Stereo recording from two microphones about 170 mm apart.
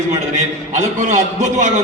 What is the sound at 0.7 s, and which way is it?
A man's voice, 45° right (ahead or behind).